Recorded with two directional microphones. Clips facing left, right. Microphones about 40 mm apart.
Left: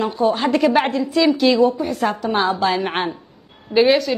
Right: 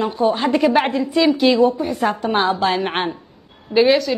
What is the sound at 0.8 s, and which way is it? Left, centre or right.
A woman's voice, right.